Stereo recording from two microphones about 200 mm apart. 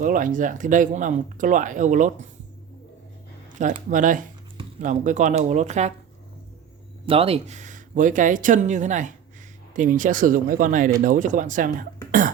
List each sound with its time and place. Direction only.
0.0 s speech: 40° right (ahead or behind)
3.6 s speech: 40° right (ahead or behind)
7.0 s speech: 30° right (ahead or behind)